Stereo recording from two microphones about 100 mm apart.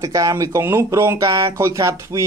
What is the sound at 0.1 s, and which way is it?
Speech, 35° right (ahead or behind).